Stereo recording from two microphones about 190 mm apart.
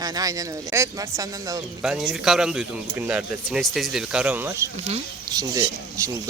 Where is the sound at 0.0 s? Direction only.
20° right (ahead or behind).